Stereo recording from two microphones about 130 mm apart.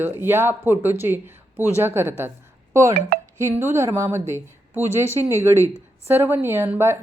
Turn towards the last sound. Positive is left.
turn(degrees=-15)  # may be behind; listen again after turning